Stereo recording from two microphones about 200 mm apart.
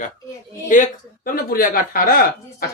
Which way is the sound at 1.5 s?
45° left (ahead or behind).